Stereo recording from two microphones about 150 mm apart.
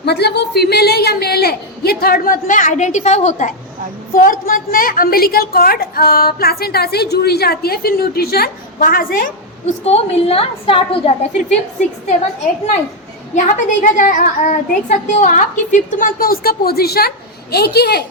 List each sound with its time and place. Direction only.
0.0 s a woman's voice: 90° left; by 3.5 s 50° left (ahead or behind)
4.1 s a woman's voice: 65° left (ahead or behind)
9.6 s a woman's voice: 45° left (ahead or behind)
13.8 s a child's voice: 60° left (ahead or behind); by 18.0 s 90° left